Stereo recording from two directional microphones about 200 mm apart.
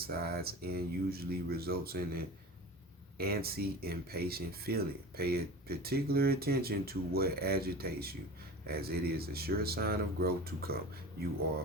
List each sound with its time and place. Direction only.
0.0 s speech: 50° right (ahead or behind)